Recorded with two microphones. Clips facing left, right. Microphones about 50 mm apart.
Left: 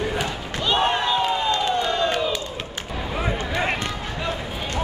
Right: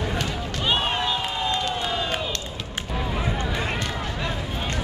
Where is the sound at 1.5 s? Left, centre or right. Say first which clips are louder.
Left 4 dB; centre.